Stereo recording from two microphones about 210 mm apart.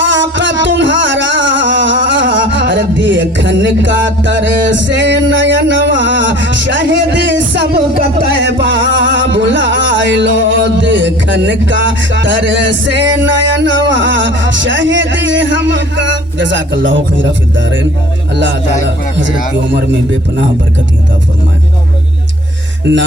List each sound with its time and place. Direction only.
0.0 s music: 60° right (ahead or behind)
17.6 s a man's voice: 60° right (ahead or behind)